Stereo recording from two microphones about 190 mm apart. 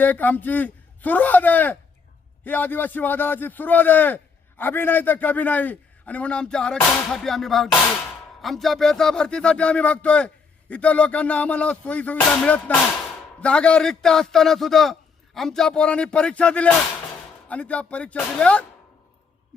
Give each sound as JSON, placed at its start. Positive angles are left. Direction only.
{"t": 0.0, "sound": "a man's voice", "side_deg": 10}